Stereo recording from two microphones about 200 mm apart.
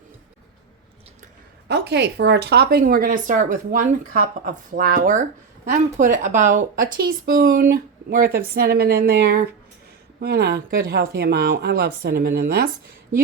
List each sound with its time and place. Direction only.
1.6 s speech: 55° right (ahead or behind)